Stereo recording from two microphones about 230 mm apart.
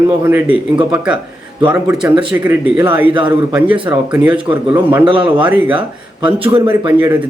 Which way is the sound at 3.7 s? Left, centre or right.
Right.